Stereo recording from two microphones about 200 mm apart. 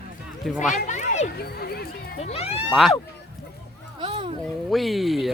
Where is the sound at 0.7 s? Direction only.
35° left (ahead or behind).